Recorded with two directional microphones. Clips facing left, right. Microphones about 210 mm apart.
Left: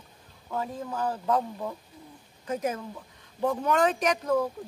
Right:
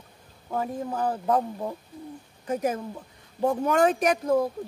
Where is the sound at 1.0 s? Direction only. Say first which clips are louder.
Right 2 dB; 25° right (ahead or behind).